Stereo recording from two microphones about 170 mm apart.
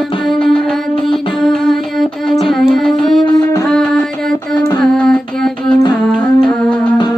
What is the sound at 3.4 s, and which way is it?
Music, 20° left (ahead or behind).